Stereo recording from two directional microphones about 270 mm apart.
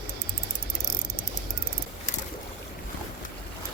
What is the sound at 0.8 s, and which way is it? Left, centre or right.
Ratchet, right.